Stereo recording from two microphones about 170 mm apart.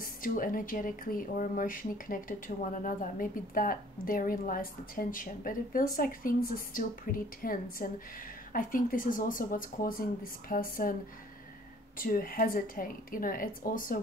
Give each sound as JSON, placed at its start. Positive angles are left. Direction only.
{"t": 0.0, "sound": "speech", "side_deg": 55}
{"t": 12.0, "sound": "speech", "side_deg": 55}